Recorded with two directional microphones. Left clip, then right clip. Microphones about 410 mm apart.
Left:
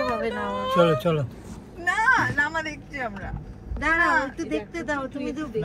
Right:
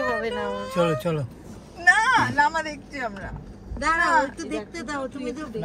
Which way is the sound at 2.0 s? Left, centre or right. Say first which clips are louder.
Right 1 dB; right.